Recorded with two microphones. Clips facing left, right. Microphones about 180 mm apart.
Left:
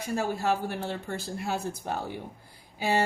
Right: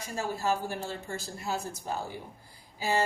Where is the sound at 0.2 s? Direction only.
60° left (ahead or behind).